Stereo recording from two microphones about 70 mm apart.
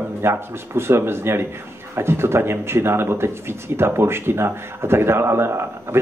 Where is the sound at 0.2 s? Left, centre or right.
Right.